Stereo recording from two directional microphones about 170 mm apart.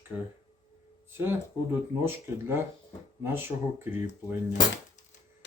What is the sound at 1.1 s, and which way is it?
A man's voice, 15° right (ahead or behind).